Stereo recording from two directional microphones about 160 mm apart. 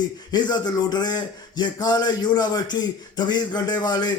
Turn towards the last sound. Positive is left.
turn(degrees=25)  # may be behind; listen again after turning